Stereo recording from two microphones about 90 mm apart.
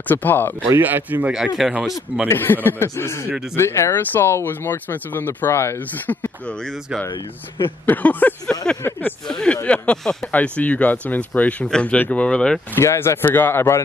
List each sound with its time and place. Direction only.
0.1 s speech: 20° left (ahead or behind)
0.7 s speech: 20° right (ahead or behind)
1.6 s speech: 5° right (ahead or behind)
2.2 s speech: 25° left (ahead or behind)
7.1 s speech: 65° left (ahead or behind)
7.8 s speech: 20° left (ahead or behind)
12.7 s speech: 30° left (ahead or behind)